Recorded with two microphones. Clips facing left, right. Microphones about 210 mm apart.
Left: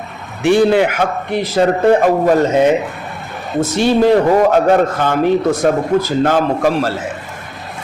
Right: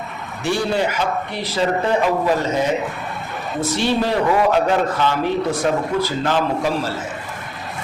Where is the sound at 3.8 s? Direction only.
50° left (ahead or behind); by 6.9 s 65° left (ahead or behind).